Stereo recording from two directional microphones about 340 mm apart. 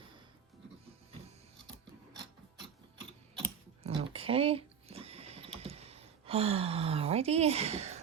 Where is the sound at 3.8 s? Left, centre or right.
Centre.